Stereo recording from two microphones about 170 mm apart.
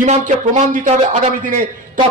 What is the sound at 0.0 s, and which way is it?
A man's voice, 50° right (ahead or behind).